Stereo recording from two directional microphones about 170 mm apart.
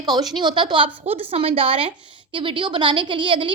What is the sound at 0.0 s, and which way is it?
A woman's voice, 25° right (ahead or behind).